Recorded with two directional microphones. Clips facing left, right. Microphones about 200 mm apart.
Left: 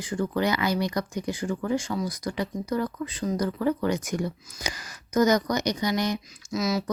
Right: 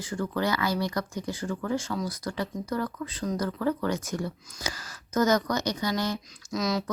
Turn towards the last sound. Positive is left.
turn(degrees=5)  # may be behind; listen again after turning